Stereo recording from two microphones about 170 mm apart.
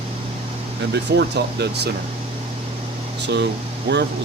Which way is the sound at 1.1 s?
75° right (ahead or behind).